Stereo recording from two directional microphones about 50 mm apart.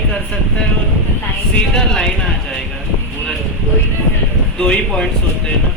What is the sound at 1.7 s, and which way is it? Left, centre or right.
Speech, centre.